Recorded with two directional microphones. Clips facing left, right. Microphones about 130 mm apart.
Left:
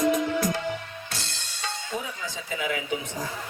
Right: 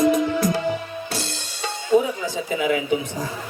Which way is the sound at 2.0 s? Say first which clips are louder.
Right 13 dB; 20° right (ahead or behind).